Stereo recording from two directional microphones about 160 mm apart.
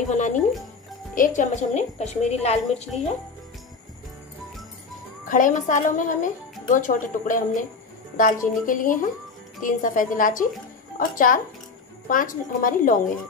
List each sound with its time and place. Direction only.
0.1 s a woman's voice: 50° left (ahead or behind)
5.2 s speech: 55° left (ahead or behind)